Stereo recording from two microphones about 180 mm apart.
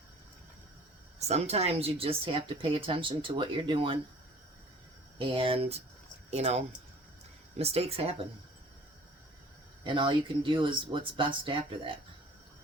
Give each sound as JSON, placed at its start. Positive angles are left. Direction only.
{"t": 1.3, "sound": "speech", "side_deg": -35}
{"t": 5.1, "sound": "speech", "side_deg": -30}
{"t": 9.8, "sound": "speech", "side_deg": -25}